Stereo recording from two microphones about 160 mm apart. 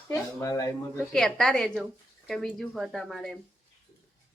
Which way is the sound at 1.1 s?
Centre (ahead or behind).